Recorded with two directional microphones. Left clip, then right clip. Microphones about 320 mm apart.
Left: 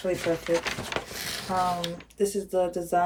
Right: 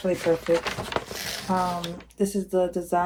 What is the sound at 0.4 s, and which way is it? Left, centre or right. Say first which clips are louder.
Speech: right 3 dB; centre.